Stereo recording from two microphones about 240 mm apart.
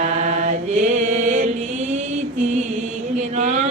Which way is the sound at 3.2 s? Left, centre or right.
Right.